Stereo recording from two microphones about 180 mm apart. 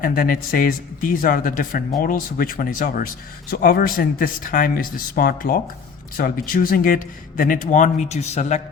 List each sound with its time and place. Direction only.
0.0 s speech: 55° left (ahead or behind)